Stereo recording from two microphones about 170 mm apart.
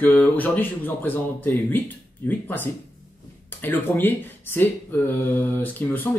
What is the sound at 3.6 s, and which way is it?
Speech, 10° left (ahead or behind).